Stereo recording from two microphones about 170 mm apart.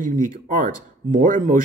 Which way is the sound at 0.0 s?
50° right (ahead or behind).